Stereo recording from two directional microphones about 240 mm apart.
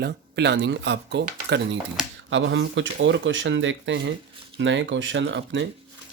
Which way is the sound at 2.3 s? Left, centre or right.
Right.